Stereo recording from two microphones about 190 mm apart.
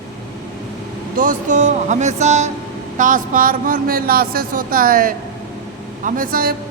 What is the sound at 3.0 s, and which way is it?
Speech, 45° right (ahead or behind).